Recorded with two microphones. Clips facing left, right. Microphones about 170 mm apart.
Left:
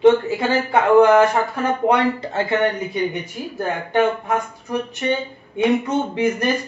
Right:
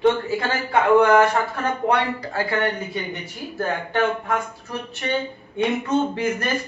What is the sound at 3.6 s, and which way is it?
Speech, 15° left (ahead or behind).